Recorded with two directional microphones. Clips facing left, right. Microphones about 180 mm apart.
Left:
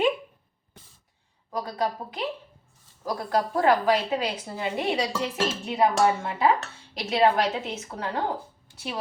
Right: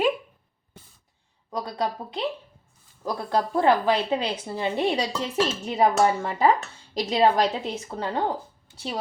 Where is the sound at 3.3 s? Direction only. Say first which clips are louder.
Right 1 dB; 25° right (ahead or behind).